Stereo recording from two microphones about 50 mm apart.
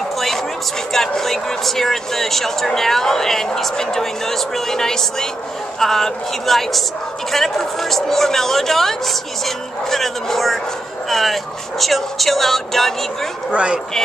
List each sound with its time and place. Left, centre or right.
0.9 s speech: centre
13.5 s speech: right